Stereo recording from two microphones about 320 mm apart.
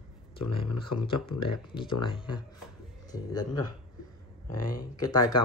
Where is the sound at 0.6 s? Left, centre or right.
Centre.